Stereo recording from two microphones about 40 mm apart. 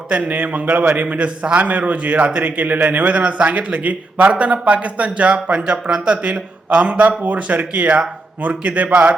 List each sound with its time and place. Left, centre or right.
0.1 s speech: right
3.0 s speech: right